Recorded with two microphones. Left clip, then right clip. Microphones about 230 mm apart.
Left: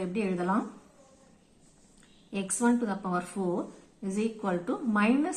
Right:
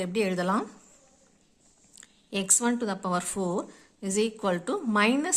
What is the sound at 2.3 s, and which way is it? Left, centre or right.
A woman's voice, right.